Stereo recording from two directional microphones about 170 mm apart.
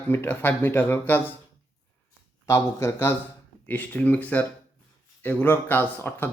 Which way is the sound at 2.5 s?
15° left (ahead or behind).